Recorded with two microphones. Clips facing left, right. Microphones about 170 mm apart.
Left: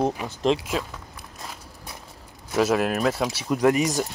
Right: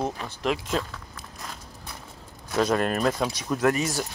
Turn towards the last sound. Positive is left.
turn(degrees=15)  # may be behind; listen again after turning